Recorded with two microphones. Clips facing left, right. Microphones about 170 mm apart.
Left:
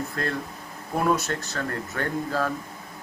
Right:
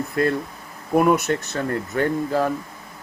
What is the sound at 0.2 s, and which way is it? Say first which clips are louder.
Speech: right 12 dB; 10° right (ahead or behind).